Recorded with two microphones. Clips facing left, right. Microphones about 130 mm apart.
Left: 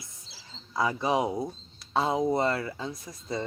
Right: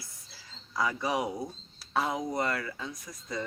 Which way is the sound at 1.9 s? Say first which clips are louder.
Left 5 dB; 25° left (ahead or behind).